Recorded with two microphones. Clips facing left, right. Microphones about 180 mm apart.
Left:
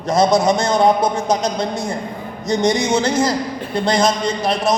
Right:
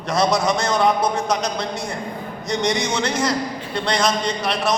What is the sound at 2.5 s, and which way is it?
Speech, 30° left (ahead or behind).